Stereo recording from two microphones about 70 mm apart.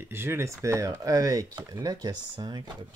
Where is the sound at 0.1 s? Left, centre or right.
Right.